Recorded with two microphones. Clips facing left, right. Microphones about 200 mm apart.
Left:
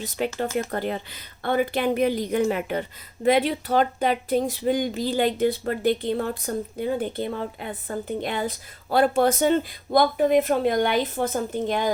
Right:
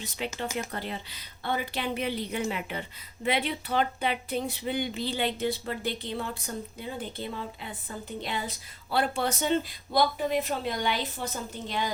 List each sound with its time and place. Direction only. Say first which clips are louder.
0.2 s speech: left 7 dB; 50° left (ahead or behind)